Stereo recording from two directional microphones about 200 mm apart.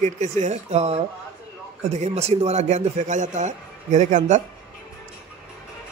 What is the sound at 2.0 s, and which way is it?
A man's voice, 30° right (ahead or behind).